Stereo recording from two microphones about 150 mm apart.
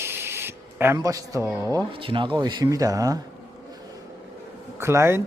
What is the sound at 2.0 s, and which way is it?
Speech, 35° right (ahead or behind).